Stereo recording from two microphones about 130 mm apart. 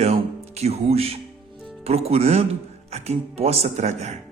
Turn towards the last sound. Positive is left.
turn(degrees=-60)  # may be behind; listen again after turning